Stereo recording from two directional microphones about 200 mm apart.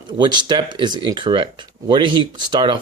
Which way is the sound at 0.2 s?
20° right (ahead or behind).